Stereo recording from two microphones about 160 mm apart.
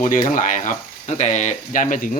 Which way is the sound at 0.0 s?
55° left (ahead or behind).